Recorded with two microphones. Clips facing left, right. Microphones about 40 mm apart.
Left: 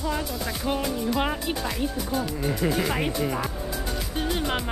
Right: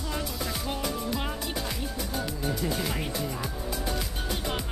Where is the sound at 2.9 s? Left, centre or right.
Left.